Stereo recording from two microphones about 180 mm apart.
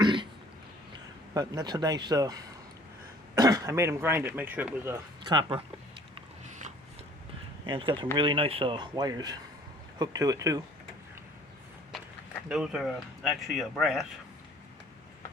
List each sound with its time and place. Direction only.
0.0 s cough: 25° right (ahead or behind)
1.3 s speech: 20° right (ahead or behind)
5.2 s speech: 25° right (ahead or behind)
7.7 s speech: 30° right (ahead or behind)
12.5 s speech: 5° right (ahead or behind)